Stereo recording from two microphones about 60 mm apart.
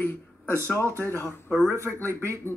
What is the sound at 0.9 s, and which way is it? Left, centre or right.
Speech, left.